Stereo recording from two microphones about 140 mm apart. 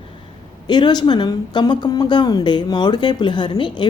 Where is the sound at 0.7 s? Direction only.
30° left (ahead or behind).